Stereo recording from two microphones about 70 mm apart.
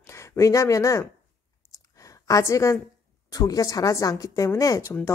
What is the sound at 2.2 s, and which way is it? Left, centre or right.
Speech, left.